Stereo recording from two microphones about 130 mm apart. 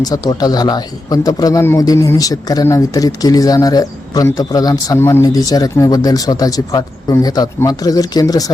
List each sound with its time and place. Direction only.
0.0 s a man's voice: 30° left (ahead or behind)